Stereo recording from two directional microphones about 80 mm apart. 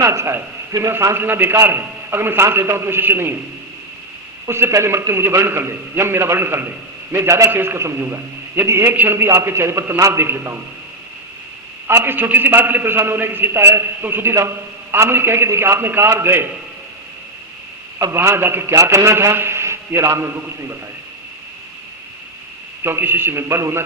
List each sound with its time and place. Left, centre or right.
0.0 s a man's voice: right
4.4 s a man's voice: right
7.2 s a man's voice: right
11.9 s a man's voice: right
18.1 s a man's voice: right
22.8 s a man's voice: right